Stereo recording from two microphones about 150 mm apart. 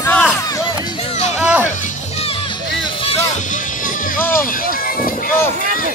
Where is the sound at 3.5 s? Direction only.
60° left (ahead or behind).